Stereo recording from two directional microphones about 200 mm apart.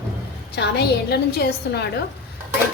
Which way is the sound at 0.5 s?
55° left (ahead or behind).